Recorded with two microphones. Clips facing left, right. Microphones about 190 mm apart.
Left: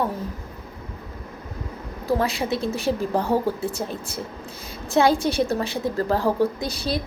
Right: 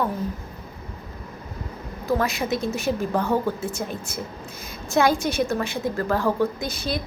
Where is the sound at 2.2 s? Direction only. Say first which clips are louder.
Left 1 dB; 30° left (ahead or behind).